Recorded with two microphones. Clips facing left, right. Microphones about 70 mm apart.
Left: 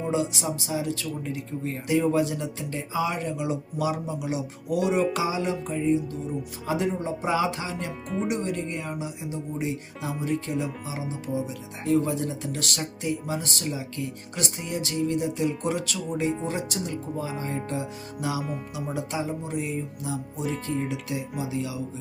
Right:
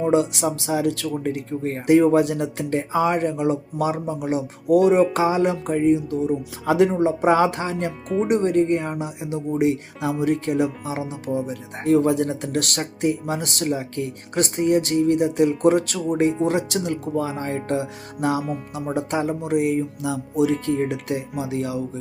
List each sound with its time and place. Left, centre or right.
0.0 s speech: right
9.6 s speech: right
16.5 s speech: right